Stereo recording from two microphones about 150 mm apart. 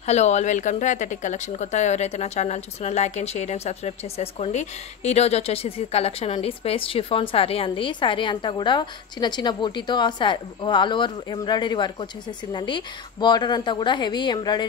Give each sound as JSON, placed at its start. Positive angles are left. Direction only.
{"t": 0.0, "sound": "a woman's voice", "side_deg": 50}